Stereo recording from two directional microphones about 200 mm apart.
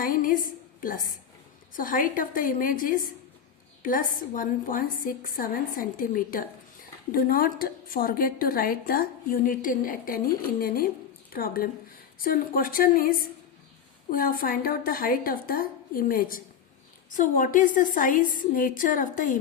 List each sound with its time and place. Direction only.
0.0 s a woman's voice: 45° left (ahead or behind)